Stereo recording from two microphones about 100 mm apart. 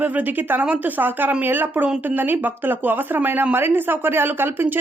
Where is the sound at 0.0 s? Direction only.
15° right (ahead or behind).